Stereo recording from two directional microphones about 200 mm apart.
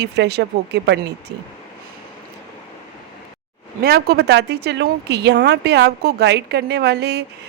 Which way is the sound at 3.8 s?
50° right (ahead or behind).